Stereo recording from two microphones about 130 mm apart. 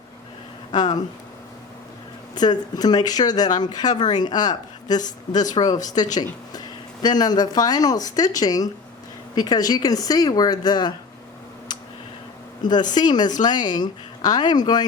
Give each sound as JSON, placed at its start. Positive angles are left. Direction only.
{"t": 0.7, "sound": "speech", "side_deg": 35}
{"t": 2.3, "sound": "speech", "side_deg": 30}
{"t": 12.9, "sound": "speech", "side_deg": 35}